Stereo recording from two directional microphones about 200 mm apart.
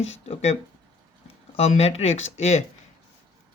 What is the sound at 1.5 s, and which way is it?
Speech, 30° left (ahead or behind).